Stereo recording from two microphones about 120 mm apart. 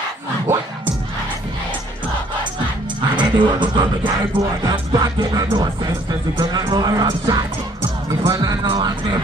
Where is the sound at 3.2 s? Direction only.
40° right (ahead or behind).